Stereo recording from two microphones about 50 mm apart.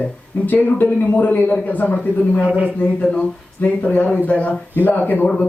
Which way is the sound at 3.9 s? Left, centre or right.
Left.